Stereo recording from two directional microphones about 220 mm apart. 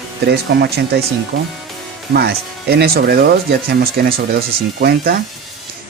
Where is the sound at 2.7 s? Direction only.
45° right (ahead or behind).